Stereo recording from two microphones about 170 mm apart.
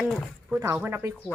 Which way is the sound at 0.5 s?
15° right (ahead or behind).